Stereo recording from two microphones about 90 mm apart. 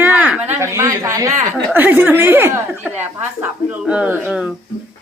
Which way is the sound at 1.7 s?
20° right (ahead or behind).